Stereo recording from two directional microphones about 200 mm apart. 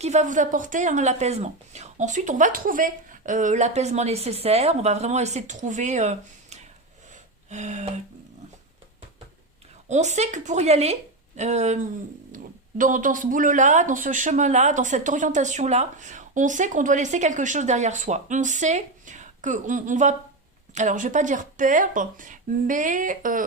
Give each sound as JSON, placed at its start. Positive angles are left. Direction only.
{"t": 0.0, "sound": "speech", "side_deg": -35}
{"t": 9.9, "sound": "speech", "side_deg": -35}